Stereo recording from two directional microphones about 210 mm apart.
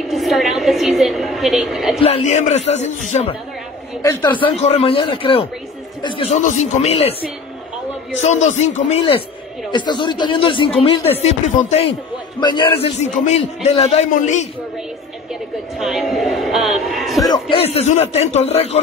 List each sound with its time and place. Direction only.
0.1 s a woman's voice: centre (ahead or behind)
2.0 s a man's voice: 30° left (ahead or behind)
4.0 s a man's voice: 15° left (ahead or behind); by 14.5 s 35° left (ahead or behind)
15.8 s a man's voice: centre (ahead or behind)
17.2 s a man's voice: 20° left (ahead or behind)